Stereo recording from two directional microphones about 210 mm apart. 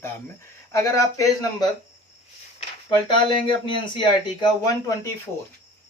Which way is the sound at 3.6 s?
25° left (ahead or behind).